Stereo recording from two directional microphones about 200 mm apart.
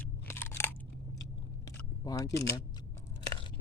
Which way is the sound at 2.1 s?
15° left (ahead or behind).